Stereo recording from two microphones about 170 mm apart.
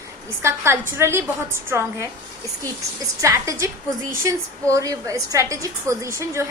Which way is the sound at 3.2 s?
15° right (ahead or behind).